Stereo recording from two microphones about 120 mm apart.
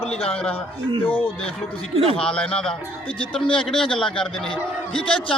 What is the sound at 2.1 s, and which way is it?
A man's voice, 10° left (ahead or behind).